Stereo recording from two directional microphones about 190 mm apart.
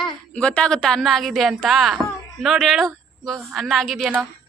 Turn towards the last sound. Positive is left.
turn(degrees=0)  # may be behind; listen again after turning